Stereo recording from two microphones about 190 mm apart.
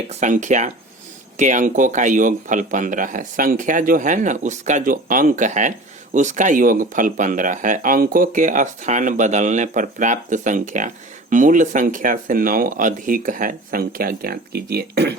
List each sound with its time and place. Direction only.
0.1 s speech: 40° right (ahead or behind); by 15.1 s 60° right (ahead or behind)